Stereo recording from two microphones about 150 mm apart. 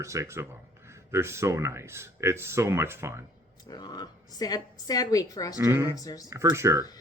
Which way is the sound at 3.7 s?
30° left (ahead or behind).